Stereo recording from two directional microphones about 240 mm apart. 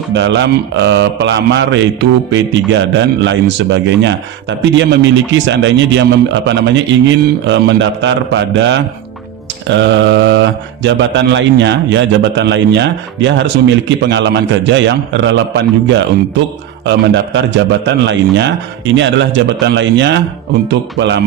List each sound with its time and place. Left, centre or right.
0.1 s mantra: right